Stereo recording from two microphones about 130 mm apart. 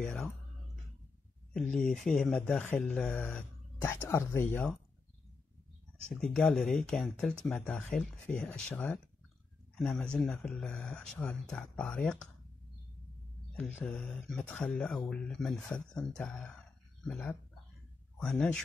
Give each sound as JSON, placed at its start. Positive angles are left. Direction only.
{"t": 0.0, "sound": "speech", "side_deg": 5}
{"t": 1.5, "sound": "speech", "side_deg": 5}
{"t": 3.9, "sound": "speech", "side_deg": 20}
{"t": 6.0, "sound": "speech", "side_deg": 10}
{"t": 13.5, "sound": "speech", "side_deg": 10}